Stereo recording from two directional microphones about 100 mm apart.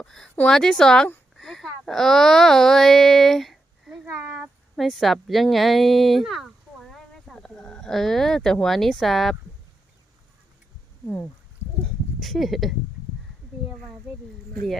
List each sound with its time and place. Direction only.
0.0 s speech: 5° left (ahead or behind)
1.4 s child singing: 5° left (ahead or behind); by 4.4 s 10° right (ahead or behind)
4.8 s speech: centre (ahead or behind)
11.0 s speech: 15° left (ahead or behind)
12.2 s speech: centre (ahead or behind)